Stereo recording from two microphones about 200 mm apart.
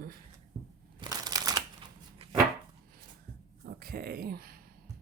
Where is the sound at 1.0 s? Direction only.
20° right (ahead or behind).